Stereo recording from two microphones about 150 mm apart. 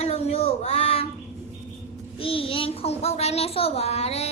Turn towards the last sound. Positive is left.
turn(degrees=45)  # may be behind; listen again after turning